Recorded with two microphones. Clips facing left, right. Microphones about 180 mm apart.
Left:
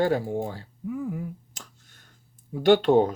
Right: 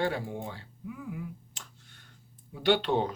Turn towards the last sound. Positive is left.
turn(degrees=45)  # may be behind; listen again after turning